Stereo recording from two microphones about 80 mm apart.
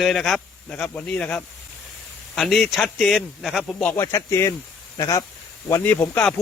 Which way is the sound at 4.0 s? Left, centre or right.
Left.